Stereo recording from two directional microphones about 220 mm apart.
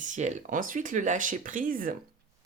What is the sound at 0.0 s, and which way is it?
Speech, 35° right (ahead or behind).